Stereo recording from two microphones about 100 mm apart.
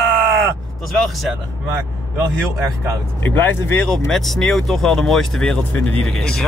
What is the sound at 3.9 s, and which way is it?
Speech, 5° left (ahead or behind).